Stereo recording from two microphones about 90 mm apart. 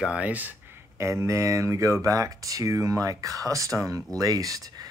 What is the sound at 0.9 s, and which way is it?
Speech, 30° right (ahead or behind).